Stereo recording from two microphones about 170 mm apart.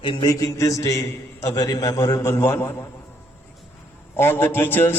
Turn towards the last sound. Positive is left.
turn(degrees=10)  # may be behind; listen again after turning